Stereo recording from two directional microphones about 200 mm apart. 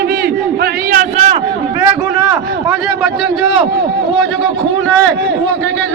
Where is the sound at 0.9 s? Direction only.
45° right (ahead or behind).